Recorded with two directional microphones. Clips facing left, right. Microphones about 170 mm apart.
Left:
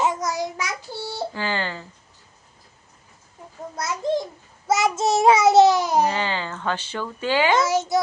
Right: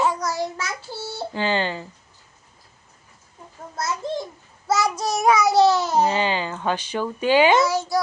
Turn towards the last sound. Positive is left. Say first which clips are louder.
# left 1 dB
turn(degrees=20)  # may be behind; listen again after turning